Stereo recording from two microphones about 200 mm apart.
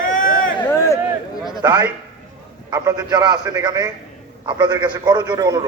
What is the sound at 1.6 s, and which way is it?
A man's voice, 20° right (ahead or behind).